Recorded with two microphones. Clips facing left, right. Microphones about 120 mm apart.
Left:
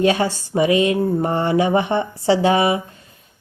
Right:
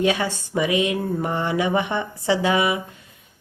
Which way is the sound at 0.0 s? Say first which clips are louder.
Left 4 dB; 35° left (ahead or behind).